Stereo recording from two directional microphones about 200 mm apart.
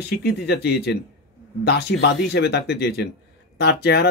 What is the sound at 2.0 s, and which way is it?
Speech, 55° left (ahead or behind).